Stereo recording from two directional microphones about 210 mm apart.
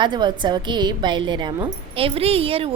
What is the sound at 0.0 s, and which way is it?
A woman's voice, 20° right (ahead or behind).